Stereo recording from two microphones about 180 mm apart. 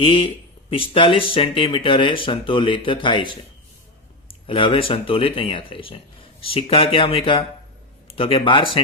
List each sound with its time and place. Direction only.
0.0 s speech: 30° left (ahead or behind)
4.4 s speech: 30° left (ahead or behind)